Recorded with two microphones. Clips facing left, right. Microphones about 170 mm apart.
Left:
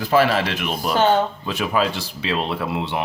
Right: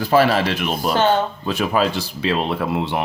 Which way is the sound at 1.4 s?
40° right (ahead or behind).